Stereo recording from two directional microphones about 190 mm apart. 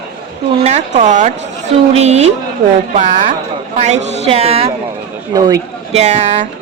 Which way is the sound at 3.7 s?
35° right (ahead or behind).